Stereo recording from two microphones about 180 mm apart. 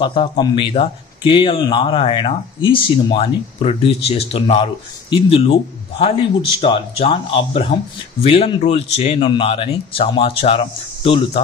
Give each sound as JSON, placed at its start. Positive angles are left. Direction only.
{"t": 0.0, "sound": "a man's voice", "side_deg": 30}